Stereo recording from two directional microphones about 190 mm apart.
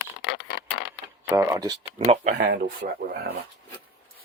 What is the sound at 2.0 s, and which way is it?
Speech, 40° right (ahead or behind).